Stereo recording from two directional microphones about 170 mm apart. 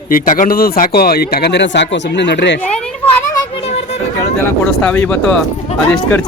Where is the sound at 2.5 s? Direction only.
5° left (ahead or behind).